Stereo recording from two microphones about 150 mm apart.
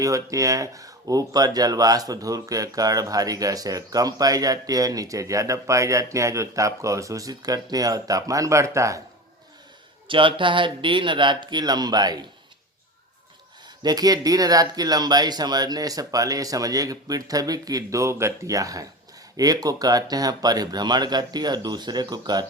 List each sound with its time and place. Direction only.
0.0 s speech: 20° right (ahead or behind)
10.1 s speech: 35° right (ahead or behind)
13.7 s speech: 25° right (ahead or behind)